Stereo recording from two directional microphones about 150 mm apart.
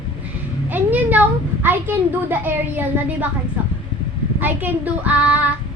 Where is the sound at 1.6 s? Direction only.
15° right (ahead or behind).